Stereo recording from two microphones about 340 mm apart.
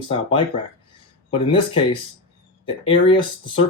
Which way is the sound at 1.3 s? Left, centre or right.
Centre.